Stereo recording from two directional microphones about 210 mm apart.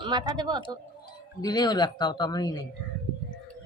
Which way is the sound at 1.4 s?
20° left (ahead or behind).